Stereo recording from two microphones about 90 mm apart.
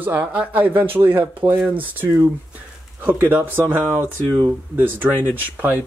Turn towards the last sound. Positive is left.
turn(degrees=-20)  # may be behind; listen again after turning